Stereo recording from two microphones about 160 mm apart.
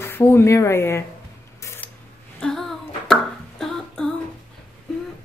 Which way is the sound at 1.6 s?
15° left (ahead or behind).